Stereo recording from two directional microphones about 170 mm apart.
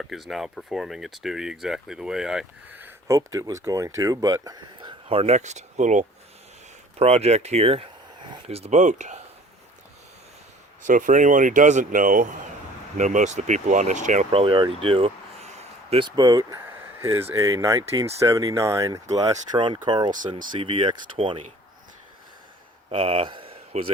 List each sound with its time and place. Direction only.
0.0 s speech: centre (ahead or behind); by 9.2 s 45° right (ahead or behind)
10.8 s speech: 50° right (ahead or behind)
14.3 s speech: 30° right (ahead or behind)
22.9 s speech: 35° right (ahead or behind)